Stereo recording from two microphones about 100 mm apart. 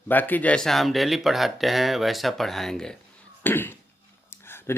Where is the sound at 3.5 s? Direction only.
20° left (ahead or behind).